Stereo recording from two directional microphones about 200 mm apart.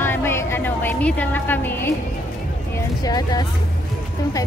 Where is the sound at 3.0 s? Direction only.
20° left (ahead or behind).